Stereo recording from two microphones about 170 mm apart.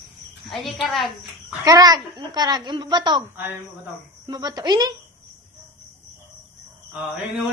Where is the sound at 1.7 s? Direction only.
20° right (ahead or behind).